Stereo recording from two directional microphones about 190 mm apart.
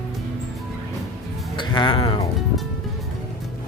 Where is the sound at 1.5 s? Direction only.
25° left (ahead or behind).